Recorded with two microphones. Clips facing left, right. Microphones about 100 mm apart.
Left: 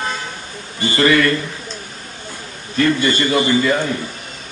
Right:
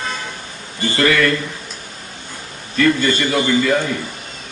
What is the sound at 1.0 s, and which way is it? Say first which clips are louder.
Speech: left 1 dB; 35° left (ahead or behind).